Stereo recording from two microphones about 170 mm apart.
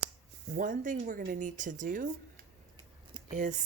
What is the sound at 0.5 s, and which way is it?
Speech, 50° right (ahead or behind).